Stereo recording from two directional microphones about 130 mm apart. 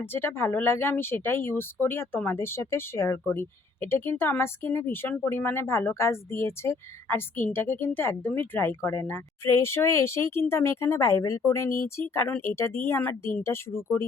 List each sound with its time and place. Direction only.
0.0 s speech: 15° left (ahead or behind)